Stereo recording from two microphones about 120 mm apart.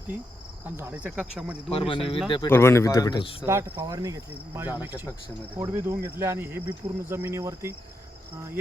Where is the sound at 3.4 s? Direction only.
20° right (ahead or behind).